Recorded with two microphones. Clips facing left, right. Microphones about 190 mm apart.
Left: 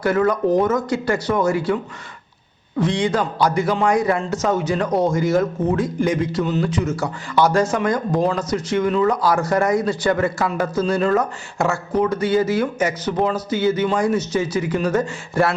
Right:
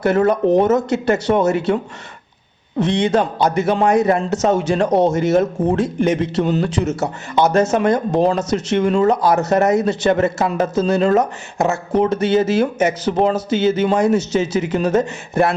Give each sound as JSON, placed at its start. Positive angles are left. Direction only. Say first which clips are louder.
{"t": 0.0, "sound": "speech", "louder": "right 3 dB", "side_deg": -25}